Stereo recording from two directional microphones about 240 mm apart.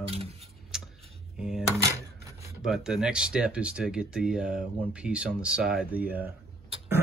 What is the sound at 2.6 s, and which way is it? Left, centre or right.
Speech, centre.